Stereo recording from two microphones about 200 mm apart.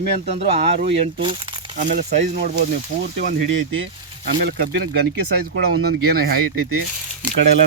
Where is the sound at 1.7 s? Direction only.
40° right (ahead or behind).